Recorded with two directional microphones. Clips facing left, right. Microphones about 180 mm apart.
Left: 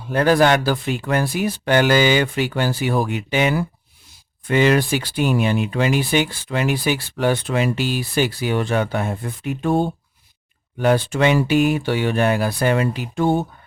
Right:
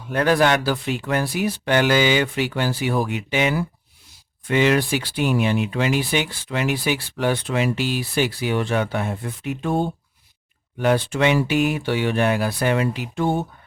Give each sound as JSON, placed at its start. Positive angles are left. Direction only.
{"t": 0.1, "sound": "speech", "side_deg": 35}
{"t": 10.8, "sound": "speech", "side_deg": 40}